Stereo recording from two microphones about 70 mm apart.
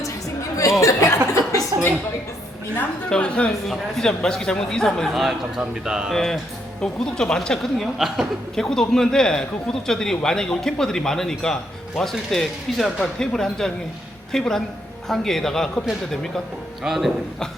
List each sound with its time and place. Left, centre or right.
0.8 s chuckle: left
1.7 s a sound: right
3.1 s speech: centre
3.7 s speech: centre
6.1 s speech: centre